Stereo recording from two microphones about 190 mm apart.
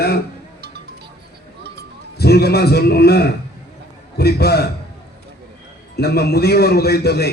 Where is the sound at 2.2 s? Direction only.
55° left (ahead or behind).